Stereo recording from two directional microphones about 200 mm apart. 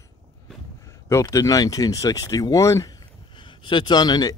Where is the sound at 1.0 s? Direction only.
15° left (ahead or behind).